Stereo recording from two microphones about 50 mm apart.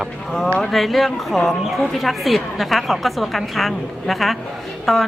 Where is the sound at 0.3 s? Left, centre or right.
Centre.